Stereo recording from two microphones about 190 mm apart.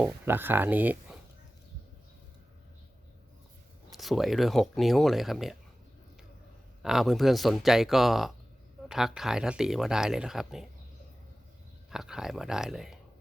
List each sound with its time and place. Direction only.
0.0 s speech: 10° right (ahead or behind)
3.9 s speech: centre (ahead or behind)
6.8 s speech: centre (ahead or behind)
11.9 s speech: 5° right (ahead or behind)